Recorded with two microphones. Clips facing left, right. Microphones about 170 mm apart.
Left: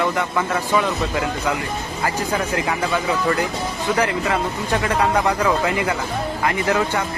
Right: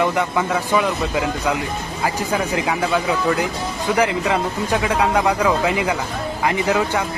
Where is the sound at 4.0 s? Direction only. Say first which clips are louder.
Right 3 dB; 15° right (ahead or behind).